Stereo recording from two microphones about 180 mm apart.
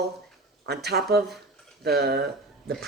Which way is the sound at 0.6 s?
65° right (ahead or behind).